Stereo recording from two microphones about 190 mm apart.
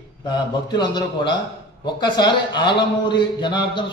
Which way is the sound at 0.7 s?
25° left (ahead or behind).